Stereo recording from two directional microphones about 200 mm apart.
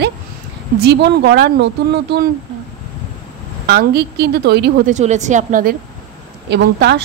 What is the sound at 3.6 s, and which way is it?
A woman's voice, 50° right (ahead or behind).